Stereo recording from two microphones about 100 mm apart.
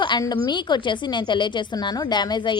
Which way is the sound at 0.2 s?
45° left (ahead or behind).